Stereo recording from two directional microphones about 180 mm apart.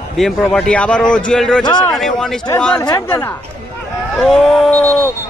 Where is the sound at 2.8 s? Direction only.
20° left (ahead or behind).